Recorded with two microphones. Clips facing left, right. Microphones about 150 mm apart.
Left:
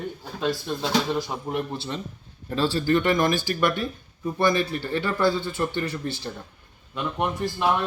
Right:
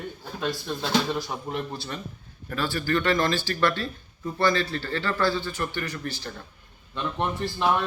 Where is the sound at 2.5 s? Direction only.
30° left (ahead or behind).